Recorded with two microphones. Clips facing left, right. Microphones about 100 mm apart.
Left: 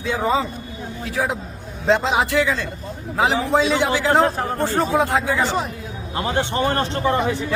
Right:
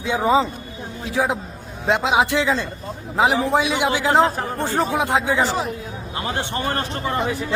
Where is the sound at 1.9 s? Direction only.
15° right (ahead or behind).